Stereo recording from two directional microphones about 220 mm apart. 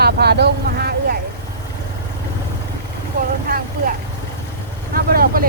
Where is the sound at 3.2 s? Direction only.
40° right (ahead or behind).